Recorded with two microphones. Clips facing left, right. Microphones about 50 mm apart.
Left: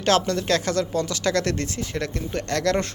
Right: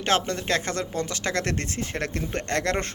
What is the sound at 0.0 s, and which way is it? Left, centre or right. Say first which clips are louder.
Speech: left 4 dB; right.